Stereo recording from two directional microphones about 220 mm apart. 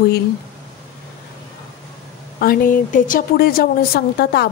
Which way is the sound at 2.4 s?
40° left (ahead or behind).